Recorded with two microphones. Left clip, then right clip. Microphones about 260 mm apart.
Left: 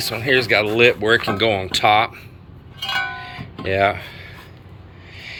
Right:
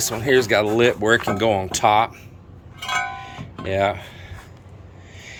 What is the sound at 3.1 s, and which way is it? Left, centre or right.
Guitar, centre.